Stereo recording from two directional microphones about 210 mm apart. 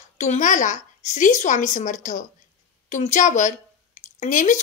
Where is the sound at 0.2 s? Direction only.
35° left (ahead or behind).